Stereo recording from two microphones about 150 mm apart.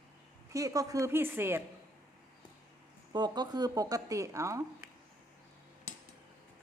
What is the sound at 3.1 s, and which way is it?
Speech, 30° right (ahead or behind).